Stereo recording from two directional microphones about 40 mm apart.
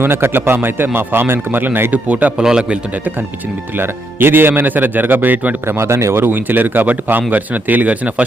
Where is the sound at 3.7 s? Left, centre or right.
Right.